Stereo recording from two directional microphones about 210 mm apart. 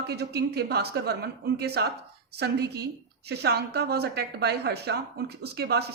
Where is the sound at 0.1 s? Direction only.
50° right (ahead or behind).